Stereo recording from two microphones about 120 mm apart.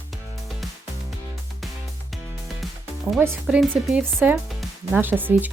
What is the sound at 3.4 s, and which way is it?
Speech, 5° right (ahead or behind).